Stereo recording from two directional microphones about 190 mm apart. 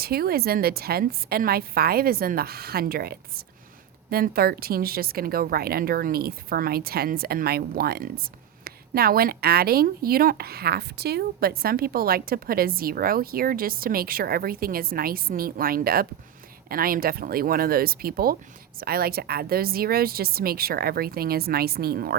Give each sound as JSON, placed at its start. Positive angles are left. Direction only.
{"t": 0.0, "sound": "a woman's voice", "side_deg": -55}